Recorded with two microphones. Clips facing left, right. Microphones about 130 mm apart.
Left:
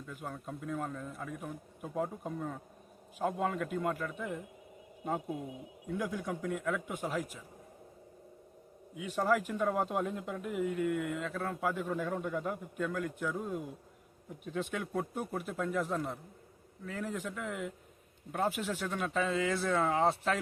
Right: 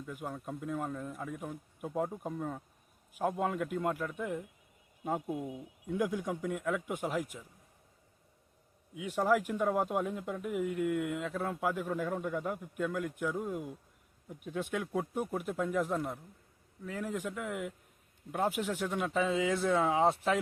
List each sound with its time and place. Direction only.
0.0 s speech: 10° right (ahead or behind)
9.0 s speech: 15° right (ahead or behind)